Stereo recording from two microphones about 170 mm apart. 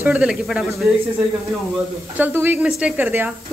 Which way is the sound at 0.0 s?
5° right (ahead or behind).